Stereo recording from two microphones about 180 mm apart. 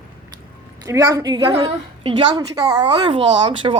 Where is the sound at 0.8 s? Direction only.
15° right (ahead or behind).